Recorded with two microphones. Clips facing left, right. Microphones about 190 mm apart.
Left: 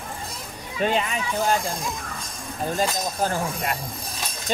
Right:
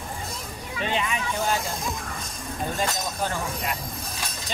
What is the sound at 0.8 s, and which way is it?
Speech, 45° left (ahead or behind).